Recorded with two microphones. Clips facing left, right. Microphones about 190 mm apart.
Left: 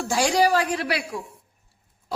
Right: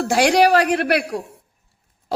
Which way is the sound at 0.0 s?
60° right (ahead or behind).